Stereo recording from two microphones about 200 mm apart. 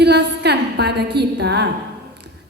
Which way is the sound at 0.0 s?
55° right (ahead or behind).